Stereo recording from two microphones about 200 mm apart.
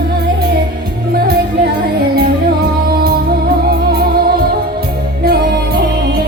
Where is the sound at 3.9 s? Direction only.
50° right (ahead or behind).